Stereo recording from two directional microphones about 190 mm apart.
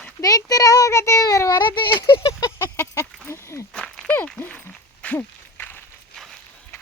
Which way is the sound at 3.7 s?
5° left (ahead or behind).